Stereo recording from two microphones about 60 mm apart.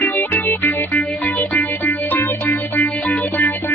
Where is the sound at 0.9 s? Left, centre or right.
Centre.